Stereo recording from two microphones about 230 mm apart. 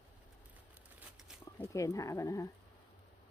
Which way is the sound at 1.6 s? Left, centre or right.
Centre.